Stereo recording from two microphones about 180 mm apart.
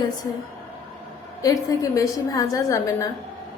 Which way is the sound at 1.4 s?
20° left (ahead or behind).